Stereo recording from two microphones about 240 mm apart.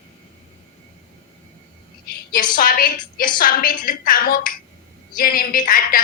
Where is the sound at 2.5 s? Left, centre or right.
Left.